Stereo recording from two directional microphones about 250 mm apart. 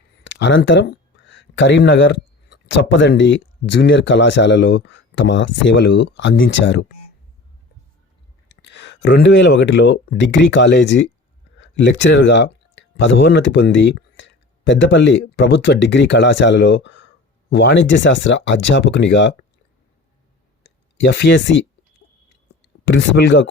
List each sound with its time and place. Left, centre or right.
0.3 s speech: left
8.6 s speech: left
21.0 s speech: left
22.6 s speech: left